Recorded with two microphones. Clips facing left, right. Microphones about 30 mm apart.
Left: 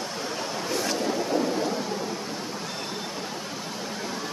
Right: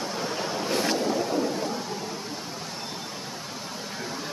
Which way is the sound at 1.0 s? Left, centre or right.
Centre.